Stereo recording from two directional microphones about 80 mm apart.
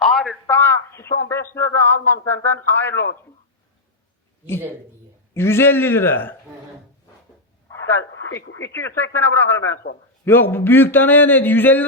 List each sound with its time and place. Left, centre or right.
0.0 s a sound: centre
0.4 s a man's voice: left
5.3 s a man's voice: left
7.7 s a man's voice: left